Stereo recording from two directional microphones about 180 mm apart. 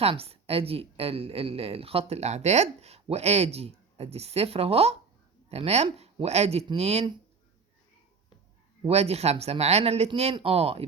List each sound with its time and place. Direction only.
0.0 s a woman's voice: 35° right (ahead or behind)
8.8 s a woman's voice: 35° right (ahead or behind)